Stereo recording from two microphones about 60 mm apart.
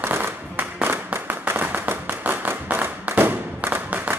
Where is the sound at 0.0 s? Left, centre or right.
Right.